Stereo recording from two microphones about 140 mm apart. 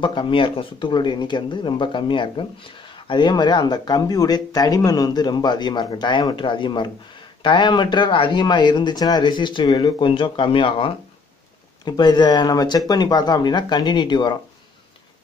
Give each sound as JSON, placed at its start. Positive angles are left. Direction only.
{"t": 0.0, "sound": "speech", "side_deg": 35}